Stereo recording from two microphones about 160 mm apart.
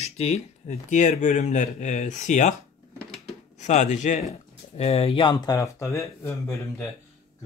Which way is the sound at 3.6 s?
45° left (ahead or behind).